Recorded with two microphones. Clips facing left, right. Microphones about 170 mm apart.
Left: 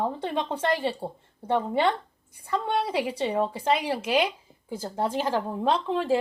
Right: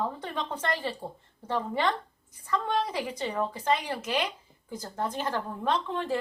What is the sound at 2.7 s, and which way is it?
Speech, 10° left (ahead or behind).